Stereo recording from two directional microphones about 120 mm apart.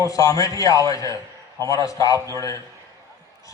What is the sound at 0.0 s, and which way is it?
A man's voice, 30° left (ahead or behind).